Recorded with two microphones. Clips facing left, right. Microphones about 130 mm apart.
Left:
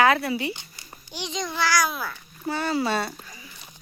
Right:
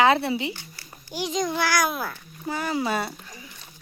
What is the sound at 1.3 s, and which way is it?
Speech, 50° right (ahead or behind).